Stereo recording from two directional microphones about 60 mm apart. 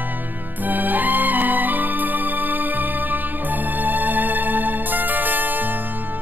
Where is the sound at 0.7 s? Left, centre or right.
Right.